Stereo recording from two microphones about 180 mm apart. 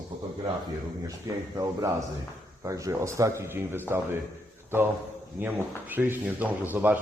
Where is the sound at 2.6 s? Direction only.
15° right (ahead or behind).